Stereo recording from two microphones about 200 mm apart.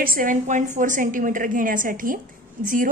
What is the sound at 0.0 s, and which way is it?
A woman's voice, 45° right (ahead or behind).